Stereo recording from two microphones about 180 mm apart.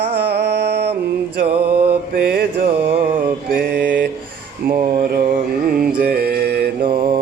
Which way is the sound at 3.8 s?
10° right (ahead or behind).